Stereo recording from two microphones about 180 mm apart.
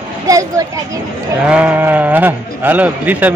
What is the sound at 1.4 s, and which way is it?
Speech, 5° right (ahead or behind).